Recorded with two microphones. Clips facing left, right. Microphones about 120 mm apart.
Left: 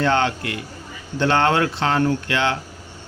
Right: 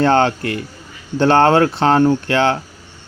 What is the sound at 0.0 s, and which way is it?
Speech, 40° right (ahead or behind).